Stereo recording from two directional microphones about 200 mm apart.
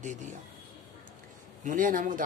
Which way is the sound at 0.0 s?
35° right (ahead or behind).